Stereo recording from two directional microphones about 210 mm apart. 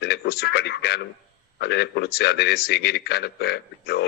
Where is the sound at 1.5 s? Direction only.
50° left (ahead or behind).